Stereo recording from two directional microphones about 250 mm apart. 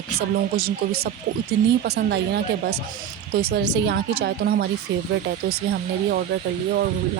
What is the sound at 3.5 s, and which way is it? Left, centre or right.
Speech, right.